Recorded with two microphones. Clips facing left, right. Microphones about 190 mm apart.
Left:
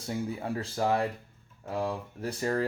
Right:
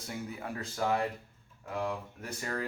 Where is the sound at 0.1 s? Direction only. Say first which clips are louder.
Left 7 dB; 30° left (ahead or behind).